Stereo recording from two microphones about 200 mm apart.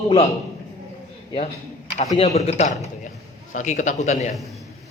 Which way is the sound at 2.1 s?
30° left (ahead or behind).